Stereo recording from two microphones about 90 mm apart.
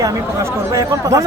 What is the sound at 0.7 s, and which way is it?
Speech, 35° right (ahead or behind).